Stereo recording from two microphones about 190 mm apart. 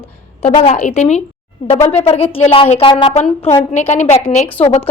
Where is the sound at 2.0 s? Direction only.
30° left (ahead or behind).